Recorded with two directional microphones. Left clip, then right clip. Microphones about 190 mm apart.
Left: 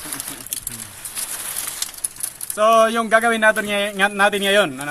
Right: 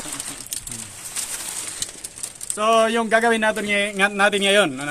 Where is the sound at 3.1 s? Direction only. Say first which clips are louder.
Left 4 dB; 10° right (ahead or behind).